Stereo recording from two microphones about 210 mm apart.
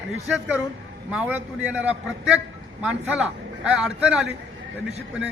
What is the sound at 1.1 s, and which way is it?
A man's voice, 5° right (ahead or behind).